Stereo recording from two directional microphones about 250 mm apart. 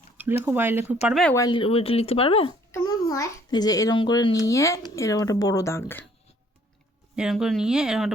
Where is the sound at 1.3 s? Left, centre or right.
Centre.